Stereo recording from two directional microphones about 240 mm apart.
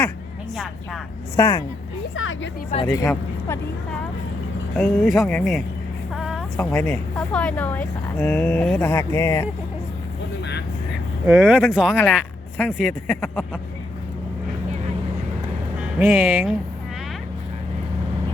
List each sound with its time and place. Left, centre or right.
1.4 s speech: centre
2.1 s speech: left
2.8 s speech: centre
4.8 s speech: centre
6.1 s a sound: centre
6.7 s speech: centre
11.3 s speech: centre
16.0 s speech: centre